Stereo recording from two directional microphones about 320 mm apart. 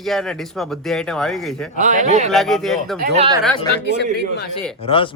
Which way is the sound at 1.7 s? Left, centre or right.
Right.